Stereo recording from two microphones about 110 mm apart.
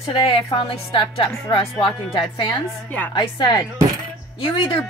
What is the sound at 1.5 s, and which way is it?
Speech, 40° left (ahead or behind).